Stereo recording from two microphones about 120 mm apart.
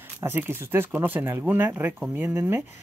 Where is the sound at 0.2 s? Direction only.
20° right (ahead or behind).